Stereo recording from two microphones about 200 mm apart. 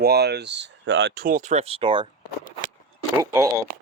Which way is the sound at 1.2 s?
40° right (ahead or behind).